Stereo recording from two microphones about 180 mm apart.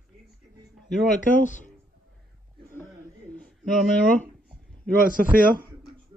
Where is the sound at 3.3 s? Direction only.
5° left (ahead or behind).